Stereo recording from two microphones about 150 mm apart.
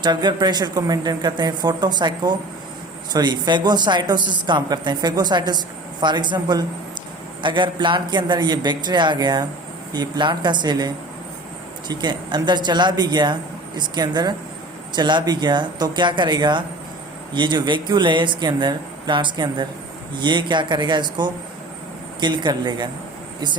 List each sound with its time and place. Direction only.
0.0 s a woman's voice: 30° right (ahead or behind)